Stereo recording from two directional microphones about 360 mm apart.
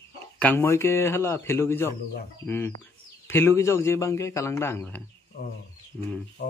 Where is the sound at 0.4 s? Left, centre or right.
Centre.